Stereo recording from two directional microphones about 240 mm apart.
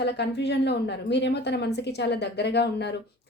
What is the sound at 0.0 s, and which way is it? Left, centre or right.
A woman's voice, left.